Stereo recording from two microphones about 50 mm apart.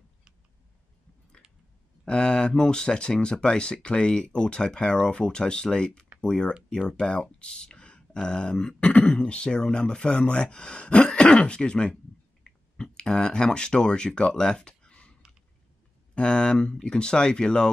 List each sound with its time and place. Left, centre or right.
2.0 s speech: centre
16.2 s speech: centre